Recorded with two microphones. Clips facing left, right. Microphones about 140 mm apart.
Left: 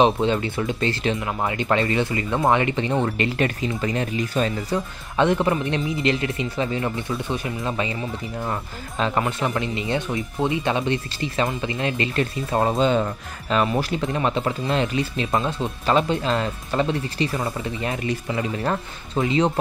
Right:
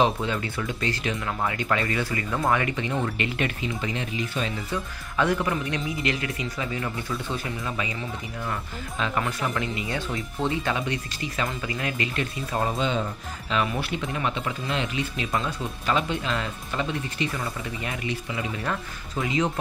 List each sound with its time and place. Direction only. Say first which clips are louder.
0.0 s speech: left 5 dB; 25° left (ahead or behind); by 4.8 s 40° left (ahead or behind)
5.1 s speech: left 5 dB; 25° left (ahead or behind)
7.2 s speech: left 4 dB; 20° left (ahead or behind)
8.4 s speech: left 3 dB; 35° left (ahead or behind)